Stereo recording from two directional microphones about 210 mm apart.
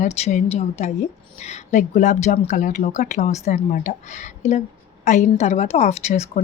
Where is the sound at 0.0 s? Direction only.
35° left (ahead or behind).